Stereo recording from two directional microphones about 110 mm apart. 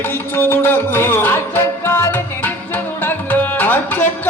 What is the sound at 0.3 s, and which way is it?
Music, 20° left (ahead or behind).